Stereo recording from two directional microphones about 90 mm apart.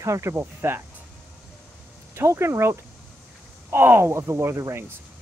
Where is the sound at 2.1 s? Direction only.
30° right (ahead or behind).